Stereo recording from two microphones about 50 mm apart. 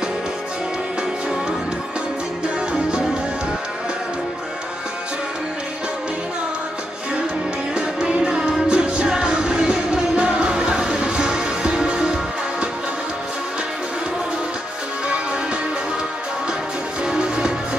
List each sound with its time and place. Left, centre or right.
2.4 s music: centre
7.7 s music: right
17.0 s music: centre